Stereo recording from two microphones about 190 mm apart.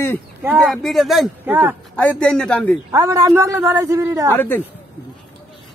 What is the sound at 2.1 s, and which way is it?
Speech, 5° left (ahead or behind).